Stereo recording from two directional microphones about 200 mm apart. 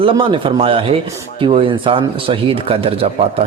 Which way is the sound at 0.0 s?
25° right (ahead or behind).